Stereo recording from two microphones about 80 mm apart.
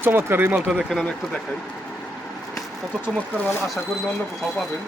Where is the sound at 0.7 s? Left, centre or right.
Centre.